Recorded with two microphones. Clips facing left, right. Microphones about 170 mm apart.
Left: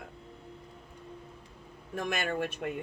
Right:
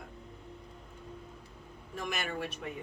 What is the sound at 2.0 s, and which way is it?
Speech, 50° left (ahead or behind).